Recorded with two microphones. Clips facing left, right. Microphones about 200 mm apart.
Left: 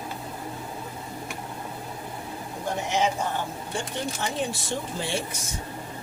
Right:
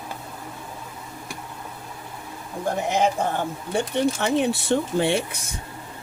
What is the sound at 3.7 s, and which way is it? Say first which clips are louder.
Speech: right 9 dB; 65° right (ahead or behind).